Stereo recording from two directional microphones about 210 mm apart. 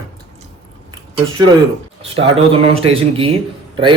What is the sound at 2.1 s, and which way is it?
A man's voice, 30° right (ahead or behind).